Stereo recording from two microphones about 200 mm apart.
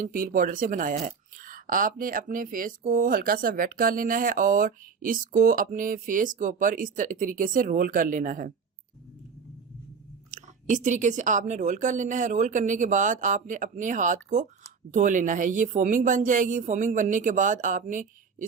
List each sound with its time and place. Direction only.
0.0 s speech: 45° right (ahead or behind)
10.3 s speech: 40° right (ahead or behind)